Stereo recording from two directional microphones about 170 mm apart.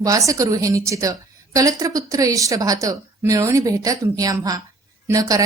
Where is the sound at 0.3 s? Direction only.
20° right (ahead or behind).